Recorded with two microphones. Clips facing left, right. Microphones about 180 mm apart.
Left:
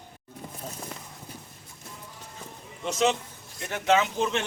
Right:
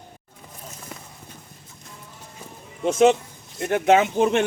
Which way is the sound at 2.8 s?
50° right (ahead or behind).